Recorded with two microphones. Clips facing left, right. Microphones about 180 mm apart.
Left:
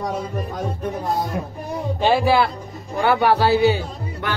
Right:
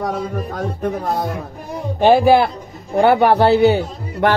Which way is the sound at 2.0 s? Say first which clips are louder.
Right 6 dB; 55° right (ahead or behind).